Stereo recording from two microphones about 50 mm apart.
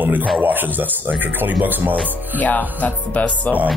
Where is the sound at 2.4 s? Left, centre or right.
Left.